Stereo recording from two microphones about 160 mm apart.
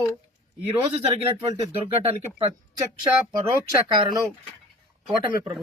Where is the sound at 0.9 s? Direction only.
40° right (ahead or behind).